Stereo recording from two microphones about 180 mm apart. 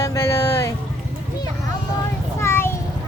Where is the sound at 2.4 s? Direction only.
15° left (ahead or behind).